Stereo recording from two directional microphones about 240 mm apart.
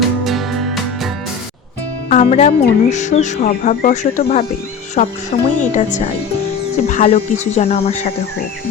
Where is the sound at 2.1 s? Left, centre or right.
Left.